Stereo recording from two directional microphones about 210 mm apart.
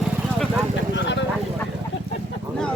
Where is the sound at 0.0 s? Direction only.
Centre (ahead or behind).